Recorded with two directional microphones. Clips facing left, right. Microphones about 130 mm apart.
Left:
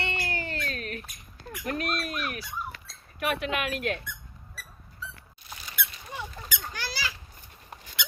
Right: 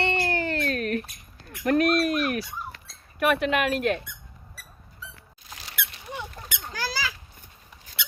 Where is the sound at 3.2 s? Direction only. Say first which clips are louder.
Right 6 dB; 55° right (ahead or behind).